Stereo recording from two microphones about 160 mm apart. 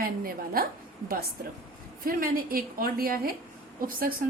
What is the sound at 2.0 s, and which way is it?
A woman's voice, 65° right (ahead or behind).